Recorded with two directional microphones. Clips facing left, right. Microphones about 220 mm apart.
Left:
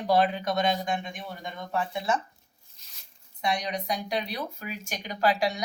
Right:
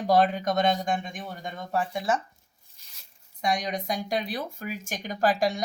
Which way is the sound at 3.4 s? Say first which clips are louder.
Right 1 dB; 45° right (ahead or behind).